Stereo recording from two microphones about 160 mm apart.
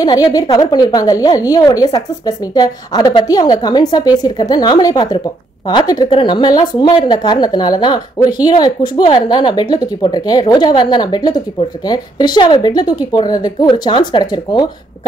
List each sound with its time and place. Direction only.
0.0 s speech: 20° left (ahead or behind)